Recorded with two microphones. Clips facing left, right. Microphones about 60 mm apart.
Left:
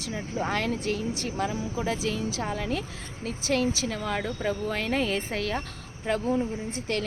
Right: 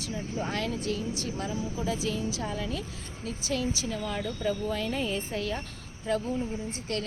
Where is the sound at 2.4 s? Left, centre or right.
Left.